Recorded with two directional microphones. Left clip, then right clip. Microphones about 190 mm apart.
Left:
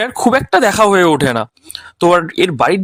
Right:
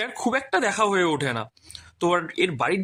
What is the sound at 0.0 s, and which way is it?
Speech, 50° left (ahead or behind).